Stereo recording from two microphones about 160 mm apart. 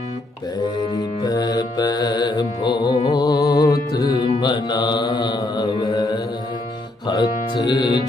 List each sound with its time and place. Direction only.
0.6 s mantra: 25° left (ahead or behind)
3.1 s music: 25° left (ahead or behind)
4.4 s mantra: 25° left (ahead or behind)
7.1 s music: 25° left (ahead or behind)